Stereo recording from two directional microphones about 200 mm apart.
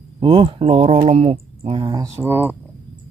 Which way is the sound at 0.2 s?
25° right (ahead or behind).